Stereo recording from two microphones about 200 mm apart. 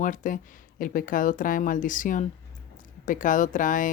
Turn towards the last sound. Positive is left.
turn(degrees=40)  # may be behind; listen again after turning